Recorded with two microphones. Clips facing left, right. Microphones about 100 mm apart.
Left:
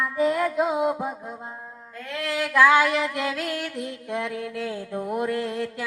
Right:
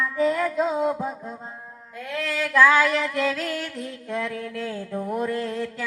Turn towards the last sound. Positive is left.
turn(degrees=15)  # may be behind; listen again after turning